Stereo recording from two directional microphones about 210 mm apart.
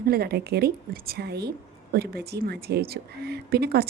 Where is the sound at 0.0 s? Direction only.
45° right (ahead or behind).